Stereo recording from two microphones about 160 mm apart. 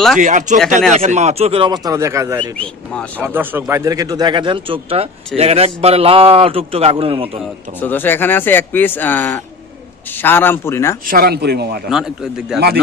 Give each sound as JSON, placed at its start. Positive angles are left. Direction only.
{"t": 0.2, "sound": "speech", "side_deg": -50}
{"t": 7.8, "sound": "speech", "side_deg": 10}
{"t": 11.1, "sound": "a man's voice", "side_deg": -70}
{"t": 11.9, "sound": "a man's voice", "side_deg": -5}